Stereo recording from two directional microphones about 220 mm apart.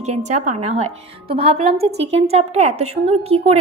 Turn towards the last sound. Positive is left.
turn(degrees=-30)  # may be behind; listen again after turning